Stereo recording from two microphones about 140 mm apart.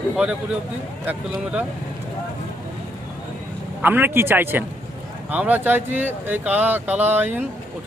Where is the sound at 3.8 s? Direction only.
15° right (ahead or behind).